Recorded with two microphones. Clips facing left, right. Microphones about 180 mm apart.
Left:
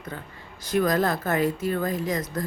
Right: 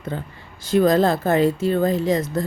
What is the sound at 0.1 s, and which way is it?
A woman's voice, 30° right (ahead or behind).